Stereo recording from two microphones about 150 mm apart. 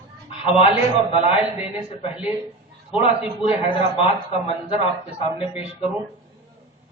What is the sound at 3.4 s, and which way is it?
A man's voice, 40° left (ahead or behind).